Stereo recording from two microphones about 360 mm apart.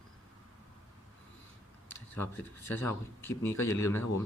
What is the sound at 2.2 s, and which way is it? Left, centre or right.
Speech, centre.